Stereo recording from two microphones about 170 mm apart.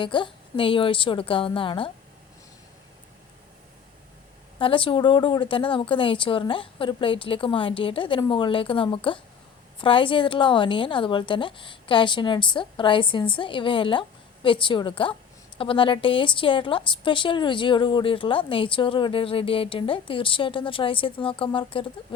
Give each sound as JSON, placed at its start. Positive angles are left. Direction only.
{"t": 0.0, "sound": "a woman's voice", "side_deg": 30}
{"t": 4.6, "sound": "a woman's voice", "side_deg": 30}